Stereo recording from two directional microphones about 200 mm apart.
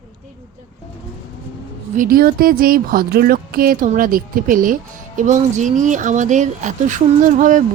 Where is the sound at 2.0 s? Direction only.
45° right (ahead or behind).